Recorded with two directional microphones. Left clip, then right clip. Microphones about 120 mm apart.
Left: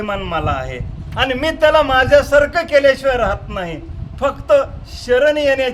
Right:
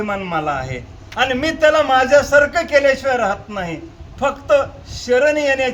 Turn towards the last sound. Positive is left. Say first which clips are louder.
# left 1 dB
turn(degrees=45)  # may be behind; listen again after turning